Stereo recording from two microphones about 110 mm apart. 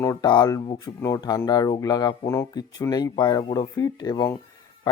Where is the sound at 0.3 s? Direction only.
45° left (ahead or behind).